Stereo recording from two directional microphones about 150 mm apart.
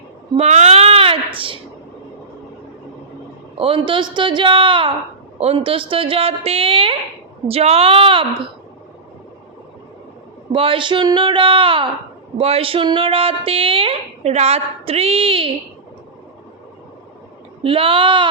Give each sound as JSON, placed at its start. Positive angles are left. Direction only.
{"t": 0.3, "sound": "a sound", "side_deg": -45}
{"t": 3.6, "sound": "a woman's voice", "side_deg": -35}
{"t": 10.5, "sound": "a woman's voice", "side_deg": -35}
{"t": 17.6, "sound": "a woman's voice", "side_deg": -35}